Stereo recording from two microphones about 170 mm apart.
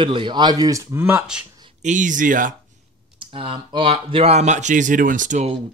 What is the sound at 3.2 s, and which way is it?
Speech, 30° right (ahead or behind).